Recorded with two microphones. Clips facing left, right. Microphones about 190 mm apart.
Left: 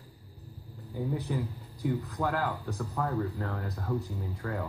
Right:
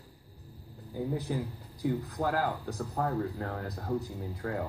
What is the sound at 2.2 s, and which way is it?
A man's voice, 40° right (ahead or behind).